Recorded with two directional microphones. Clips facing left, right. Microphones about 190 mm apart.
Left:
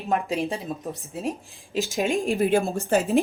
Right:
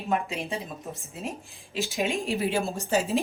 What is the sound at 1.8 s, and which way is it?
A woman's voice, 45° left (ahead or behind).